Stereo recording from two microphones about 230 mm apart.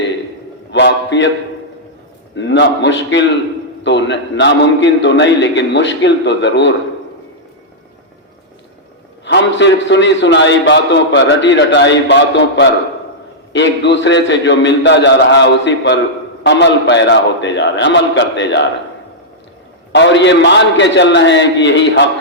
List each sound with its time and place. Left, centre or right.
0.7 s a sound: left
2.3 s a man's voice: left
9.2 s a man's voice: left
19.9 s a man's voice: left